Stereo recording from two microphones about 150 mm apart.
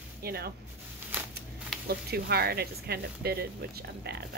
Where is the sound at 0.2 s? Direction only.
90° right.